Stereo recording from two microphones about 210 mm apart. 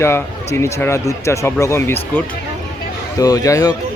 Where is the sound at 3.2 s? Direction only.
15° left (ahead or behind).